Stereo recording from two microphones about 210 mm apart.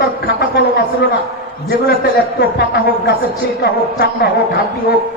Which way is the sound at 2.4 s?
50° left (ahead or behind).